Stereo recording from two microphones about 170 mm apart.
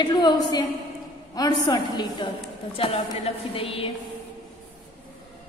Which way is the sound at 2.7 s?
35° left (ahead or behind).